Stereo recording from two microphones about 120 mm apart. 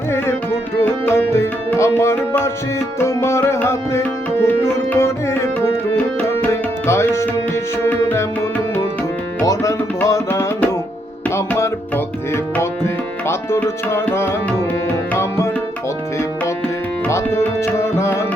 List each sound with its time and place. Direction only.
0.8 s music: 20° left (ahead or behind)
9.5 s tabla: 25° left (ahead or behind)
11.3 s music: 20° left (ahead or behind)
12.5 s tabla: 20° left (ahead or behind)
17.1 s tabla: 20° left (ahead or behind)